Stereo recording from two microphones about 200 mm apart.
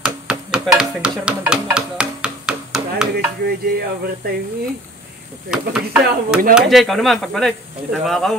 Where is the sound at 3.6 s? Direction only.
50° right (ahead or behind).